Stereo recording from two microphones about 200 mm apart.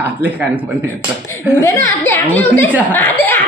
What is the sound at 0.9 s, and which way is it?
Speech, 10° left (ahead or behind).